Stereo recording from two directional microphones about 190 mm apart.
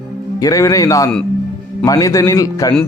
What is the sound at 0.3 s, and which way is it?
Speech, 20° left (ahead or behind).